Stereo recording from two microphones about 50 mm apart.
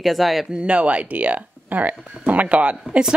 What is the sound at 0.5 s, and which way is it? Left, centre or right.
Speech, right.